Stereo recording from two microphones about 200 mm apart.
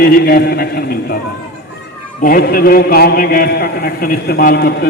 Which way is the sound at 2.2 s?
45° left (ahead or behind).